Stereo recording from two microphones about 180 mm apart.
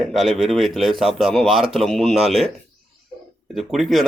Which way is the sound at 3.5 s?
Centre (ahead or behind).